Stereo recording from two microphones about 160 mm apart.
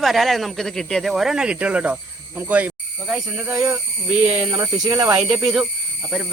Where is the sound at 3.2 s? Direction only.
20° right (ahead or behind).